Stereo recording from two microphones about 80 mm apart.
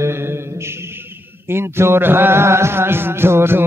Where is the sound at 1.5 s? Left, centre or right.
Right.